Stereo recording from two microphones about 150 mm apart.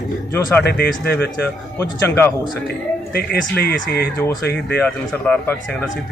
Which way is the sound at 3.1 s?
90° left.